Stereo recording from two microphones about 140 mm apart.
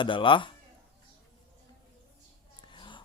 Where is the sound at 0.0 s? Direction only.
35° left (ahead or behind).